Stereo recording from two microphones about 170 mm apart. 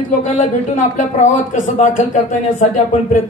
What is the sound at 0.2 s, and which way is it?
Speech, 45° left (ahead or behind).